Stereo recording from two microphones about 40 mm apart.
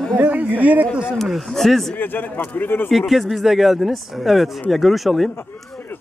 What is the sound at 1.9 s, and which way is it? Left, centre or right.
Speech, left.